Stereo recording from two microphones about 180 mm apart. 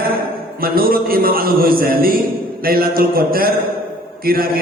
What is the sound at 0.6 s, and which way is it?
A man's voice, 55° right (ahead or behind).